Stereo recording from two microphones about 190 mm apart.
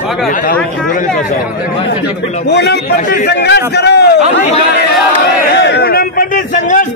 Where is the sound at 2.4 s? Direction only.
60° left (ahead or behind).